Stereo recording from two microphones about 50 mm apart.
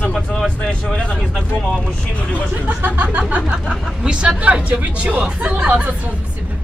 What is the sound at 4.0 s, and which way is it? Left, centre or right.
Speech, centre.